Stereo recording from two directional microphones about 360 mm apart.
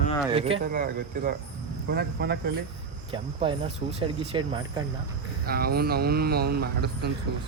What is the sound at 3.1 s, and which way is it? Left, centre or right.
Speech, centre.